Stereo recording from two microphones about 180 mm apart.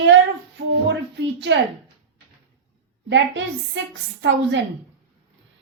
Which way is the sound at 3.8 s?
90° right.